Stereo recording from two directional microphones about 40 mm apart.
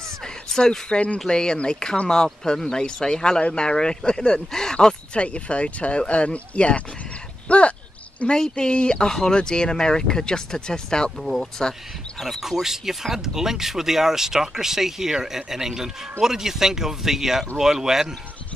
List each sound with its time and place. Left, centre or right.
0.2 s speech: centre
5.1 s speech: left
11.1 s speech: centre